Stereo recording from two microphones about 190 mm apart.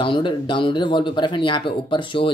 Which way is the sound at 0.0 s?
25° left (ahead or behind).